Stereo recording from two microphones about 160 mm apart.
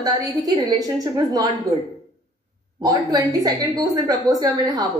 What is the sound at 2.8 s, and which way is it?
A woman's voice, 25° right (ahead or behind).